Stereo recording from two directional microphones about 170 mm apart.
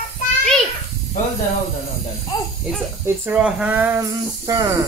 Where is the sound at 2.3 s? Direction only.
25° left (ahead or behind).